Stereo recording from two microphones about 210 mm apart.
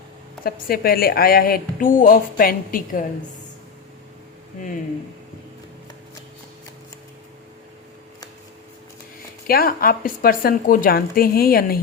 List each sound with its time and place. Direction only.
0.4 s a woman's voice: 45° left (ahead or behind)
9.5 s a woman's voice: 45° left (ahead or behind)